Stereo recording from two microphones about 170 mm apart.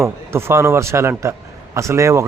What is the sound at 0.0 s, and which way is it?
A man's voice, 15° right (ahead or behind).